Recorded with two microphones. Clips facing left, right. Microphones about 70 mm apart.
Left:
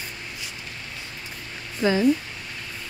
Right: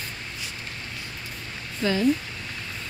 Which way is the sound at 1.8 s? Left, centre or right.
Centre.